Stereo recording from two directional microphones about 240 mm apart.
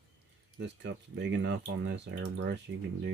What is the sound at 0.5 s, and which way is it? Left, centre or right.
Speech, right.